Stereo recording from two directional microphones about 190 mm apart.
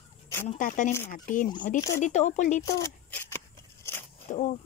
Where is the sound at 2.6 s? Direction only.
15° left (ahead or behind).